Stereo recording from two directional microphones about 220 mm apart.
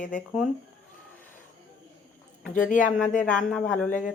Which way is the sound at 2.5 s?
35° left (ahead or behind).